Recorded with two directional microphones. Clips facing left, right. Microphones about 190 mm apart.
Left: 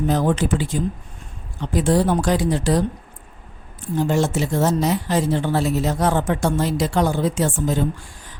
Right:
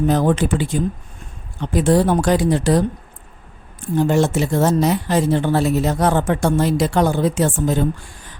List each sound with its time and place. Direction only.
0.1 s speech: 55° right (ahead or behind)